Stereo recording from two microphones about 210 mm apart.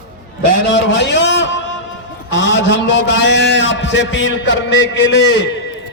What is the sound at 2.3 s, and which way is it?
A man's voice, 60° left (ahead or behind).